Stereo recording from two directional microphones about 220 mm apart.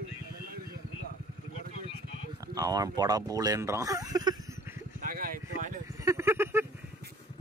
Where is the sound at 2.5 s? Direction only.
15° right (ahead or behind).